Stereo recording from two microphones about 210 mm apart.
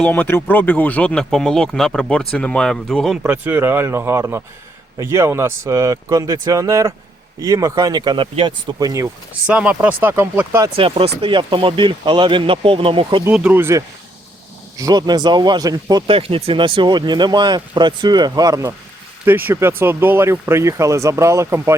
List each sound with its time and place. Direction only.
0.0 s speech: 10° left (ahead or behind); by 9.0 s 15° right (ahead or behind)
9.5 s speech: 5° right (ahead or behind)
10.8 s speech: 25° right (ahead or behind)
13.2 s speech: 5° right (ahead or behind)